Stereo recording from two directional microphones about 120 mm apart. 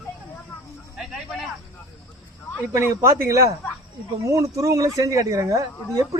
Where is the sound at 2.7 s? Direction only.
25° right (ahead or behind).